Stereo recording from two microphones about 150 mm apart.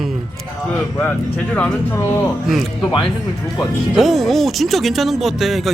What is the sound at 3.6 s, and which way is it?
Speech, centre (ahead or behind).